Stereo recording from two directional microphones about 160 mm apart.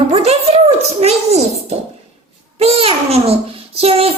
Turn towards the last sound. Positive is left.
turn(degrees=-40)  # may be behind; listen again after turning